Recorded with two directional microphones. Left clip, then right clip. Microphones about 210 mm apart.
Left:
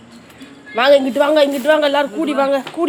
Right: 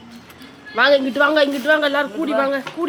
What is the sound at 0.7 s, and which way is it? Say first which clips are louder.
A woman's voice: left 3 dB; 15° left (ahead or behind).